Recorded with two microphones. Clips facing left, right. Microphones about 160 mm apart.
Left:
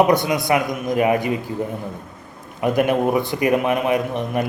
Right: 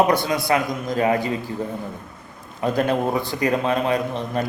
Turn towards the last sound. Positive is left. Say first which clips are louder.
# left 2 dB
turn(degrees=15)  # may be behind; listen again after turning